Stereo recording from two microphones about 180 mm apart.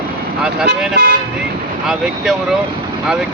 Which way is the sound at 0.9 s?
70° right (ahead or behind).